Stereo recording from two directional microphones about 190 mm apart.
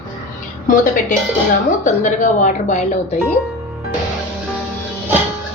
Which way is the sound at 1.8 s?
40° left (ahead or behind).